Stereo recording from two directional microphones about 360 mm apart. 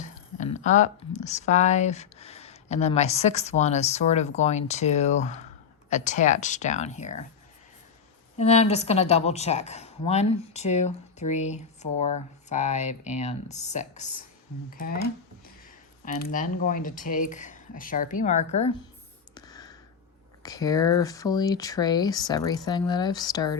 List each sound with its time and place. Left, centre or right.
0.0 s a woman's voice: left
8.4 s a woman's voice: centre
16.2 s a woman's voice: left
19.3 s clicking: centre
20.4 s speech: centre